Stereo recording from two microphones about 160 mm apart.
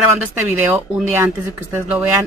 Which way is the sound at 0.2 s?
10° right (ahead or behind).